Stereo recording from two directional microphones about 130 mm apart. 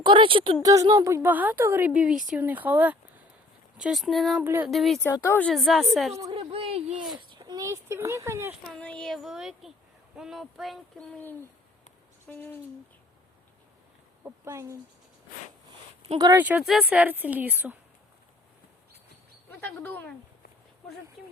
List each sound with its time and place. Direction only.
0.0 s a woman's voice: 40° right (ahead or behind)
0.6 s a woman's voice: 25° right (ahead or behind); by 4.4 s centre (ahead or behind)
4.4 s a woman's voice: 15° right (ahead or behind)
4.7 s speech: centre (ahead or behind)
5.2 s speech: 15° left (ahead or behind)
5.5 s speech: centre (ahead or behind)
6.3 s speech: 45° right (ahead or behind)
7.3 s speech: 35° right (ahead or behind)
8.8 s speech: 10° left (ahead or behind)
14.3 s speech: 20° right (ahead or behind)
16.1 s speech: 25° right (ahead or behind)
16.4 s a woman's voice: 10° right (ahead or behind)
19.5 s speech: 15° left (ahead or behind)